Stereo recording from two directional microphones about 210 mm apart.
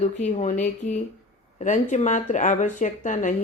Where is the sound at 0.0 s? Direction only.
35° left (ahead or behind).